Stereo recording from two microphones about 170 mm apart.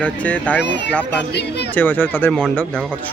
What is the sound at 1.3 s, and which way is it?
Speech, 75° left (ahead or behind).